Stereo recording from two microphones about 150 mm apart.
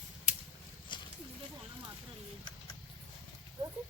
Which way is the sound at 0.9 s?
30° left (ahead or behind).